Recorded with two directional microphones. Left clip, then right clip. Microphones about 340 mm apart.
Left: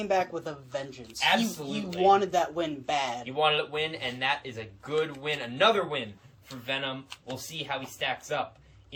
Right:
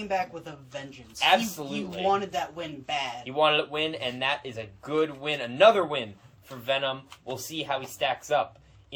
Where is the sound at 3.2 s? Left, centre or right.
Centre.